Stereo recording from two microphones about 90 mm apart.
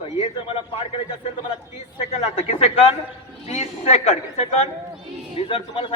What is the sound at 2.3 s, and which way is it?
Speech, 90° left.